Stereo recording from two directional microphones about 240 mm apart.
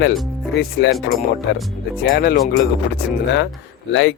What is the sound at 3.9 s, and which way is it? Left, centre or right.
Speech, left.